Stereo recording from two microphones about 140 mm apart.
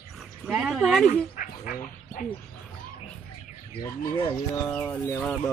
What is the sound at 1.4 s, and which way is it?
Speech, 70° left (ahead or behind).